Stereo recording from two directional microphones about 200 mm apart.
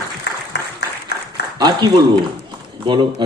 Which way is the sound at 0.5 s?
55° left (ahead or behind).